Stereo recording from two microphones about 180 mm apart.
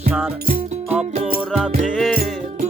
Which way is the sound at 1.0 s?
35° right (ahead or behind).